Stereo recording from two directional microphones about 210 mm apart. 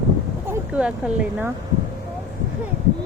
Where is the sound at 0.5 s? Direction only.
5° right (ahead or behind).